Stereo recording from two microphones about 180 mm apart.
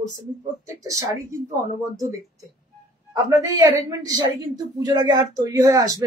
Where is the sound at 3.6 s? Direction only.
20° right (ahead or behind).